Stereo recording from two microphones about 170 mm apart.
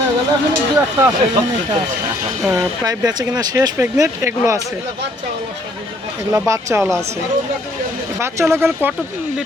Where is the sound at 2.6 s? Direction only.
20° right (ahead or behind).